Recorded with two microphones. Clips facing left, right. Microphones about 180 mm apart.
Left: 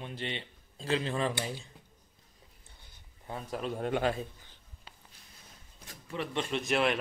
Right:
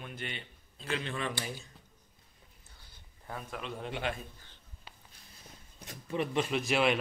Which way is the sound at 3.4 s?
40° left (ahead or behind).